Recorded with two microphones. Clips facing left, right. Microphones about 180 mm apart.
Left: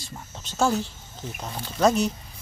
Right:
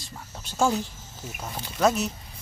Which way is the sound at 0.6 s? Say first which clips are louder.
Left 1 dB; 10° right (ahead or behind).